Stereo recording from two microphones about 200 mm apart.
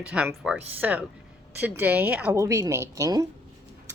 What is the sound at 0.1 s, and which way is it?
A woman's voice, 5° right (ahead or behind).